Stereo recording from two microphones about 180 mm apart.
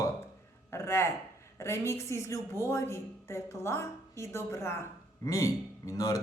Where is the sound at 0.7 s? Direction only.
15° left (ahead or behind).